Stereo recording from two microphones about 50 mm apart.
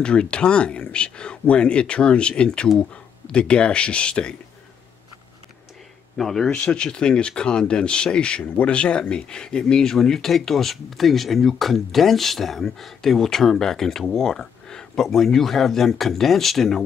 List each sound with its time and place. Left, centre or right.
0.0 s speech: centre
6.1 s speech: centre